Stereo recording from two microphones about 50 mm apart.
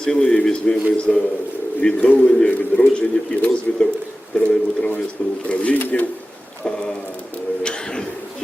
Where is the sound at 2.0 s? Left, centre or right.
Left.